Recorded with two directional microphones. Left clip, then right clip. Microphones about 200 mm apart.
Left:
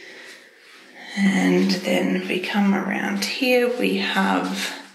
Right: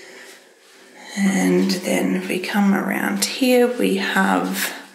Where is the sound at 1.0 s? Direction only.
5° right (ahead or behind); by 4.7 s 25° right (ahead or behind).